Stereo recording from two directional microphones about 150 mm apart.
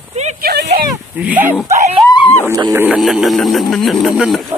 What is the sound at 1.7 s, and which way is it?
Speech, 50° right (ahead or behind).